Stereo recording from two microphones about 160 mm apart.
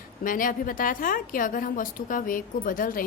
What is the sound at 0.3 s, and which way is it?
A woman's voice, 60° left (ahead or behind).